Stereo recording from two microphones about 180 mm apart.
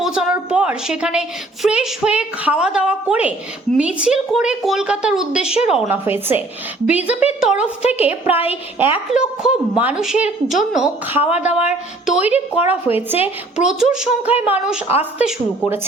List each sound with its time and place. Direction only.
0.0 s a sound: 5° right (ahead or behind)
1.6 s a woman's voice: 5° right (ahead or behind)
7.9 s a woman's voice: 35° left (ahead or behind)
8.8 s a woman's voice: 10° right (ahead or behind)